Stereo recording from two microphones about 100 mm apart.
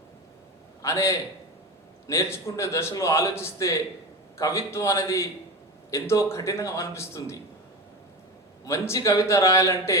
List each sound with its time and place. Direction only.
0.8 s a man's voice: 30° left (ahead or behind)
8.6 s a man's voice: 30° left (ahead or behind)